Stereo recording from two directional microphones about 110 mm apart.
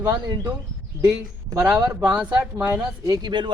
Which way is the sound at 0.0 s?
30° right (ahead or behind).